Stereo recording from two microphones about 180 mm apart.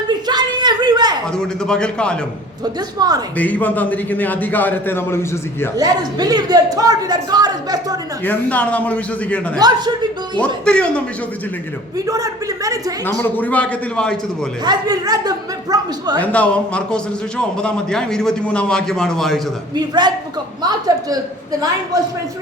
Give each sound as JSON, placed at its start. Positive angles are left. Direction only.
{"t": 0.3, "sound": "a sound", "side_deg": -25}
{"t": 1.3, "sound": "a man's voice", "side_deg": 5}
{"t": 3.0, "sound": "speech", "side_deg": -20}
{"t": 3.3, "sound": "a man's voice", "side_deg": 10}
{"t": 5.7, "sound": "speech", "side_deg": -20}
{"t": 8.2, "sound": "a man's voice", "side_deg": 10}
{"t": 9.6, "sound": "speech", "side_deg": -25}
{"t": 10.3, "sound": "a man's voice", "side_deg": 5}
{"t": 11.9, "sound": "speech", "side_deg": -20}
{"t": 13.1, "sound": "a man's voice", "side_deg": 10}
{"t": 14.6, "sound": "speech", "side_deg": -20}
{"t": 16.2, "sound": "a man's voice", "side_deg": 5}
{"t": 19.7, "sound": "speech", "side_deg": -25}